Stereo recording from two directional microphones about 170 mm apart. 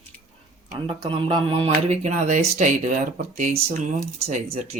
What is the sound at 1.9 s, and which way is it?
Speech, 45° right (ahead or behind).